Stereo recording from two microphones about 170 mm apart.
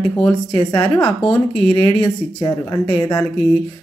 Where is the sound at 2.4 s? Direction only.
15° left (ahead or behind).